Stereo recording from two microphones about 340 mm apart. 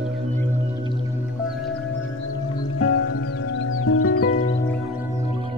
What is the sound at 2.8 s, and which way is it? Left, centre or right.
Music, left.